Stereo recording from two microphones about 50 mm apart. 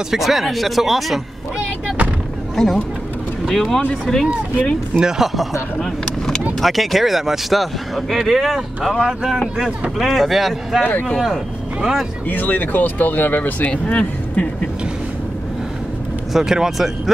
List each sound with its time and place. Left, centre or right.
0.1 s speech: centre
2.5 s speech: centre
4.9 s speech: centre
5.8 s vehicle: centre
6.6 s speech: centre
9.9 s speech: centre
11.8 s speech: centre
12.3 s speech: left
13.7 s speech: left
16.3 s speech: centre